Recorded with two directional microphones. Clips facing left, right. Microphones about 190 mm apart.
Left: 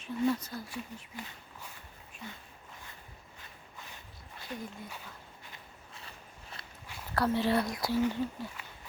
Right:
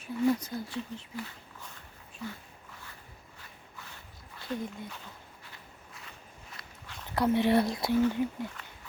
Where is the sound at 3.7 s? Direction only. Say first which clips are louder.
Even; 20° left (ahead or behind).